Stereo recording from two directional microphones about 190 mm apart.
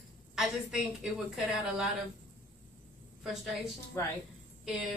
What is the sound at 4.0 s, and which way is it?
Speech, 15° left (ahead or behind).